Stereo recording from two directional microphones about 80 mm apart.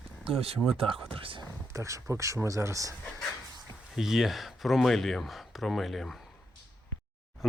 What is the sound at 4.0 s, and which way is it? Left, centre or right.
Speech, centre.